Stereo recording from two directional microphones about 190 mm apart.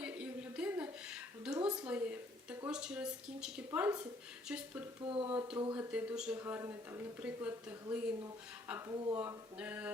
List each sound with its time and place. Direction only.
0.0 s a sound: 5° right (ahead or behind)
2.6 s a woman's voice: 5° right (ahead or behind)
4.9 s speech: 25° right (ahead or behind)
5.3 s speech: 10° right (ahead or behind)